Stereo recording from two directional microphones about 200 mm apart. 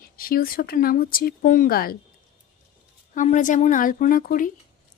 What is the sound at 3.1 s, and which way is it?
Speech, 40° left (ahead or behind).